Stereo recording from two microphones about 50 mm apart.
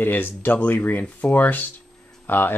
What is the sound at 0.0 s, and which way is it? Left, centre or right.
Speech, left.